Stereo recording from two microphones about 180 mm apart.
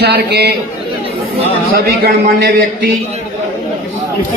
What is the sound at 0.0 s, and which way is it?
Speech, 65° right (ahead or behind).